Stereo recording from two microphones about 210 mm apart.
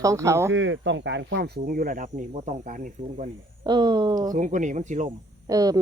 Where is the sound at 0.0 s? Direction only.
15° right (ahead or behind).